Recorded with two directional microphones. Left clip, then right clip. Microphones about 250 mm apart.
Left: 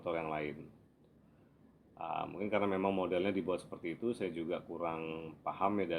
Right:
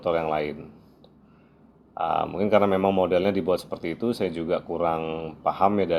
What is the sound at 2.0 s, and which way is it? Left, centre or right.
Speech, right.